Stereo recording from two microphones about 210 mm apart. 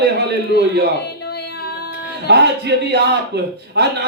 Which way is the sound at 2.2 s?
55° right (ahead or behind).